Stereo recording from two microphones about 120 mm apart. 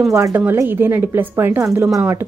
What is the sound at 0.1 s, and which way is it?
A woman's voice, 25° right (ahead or behind).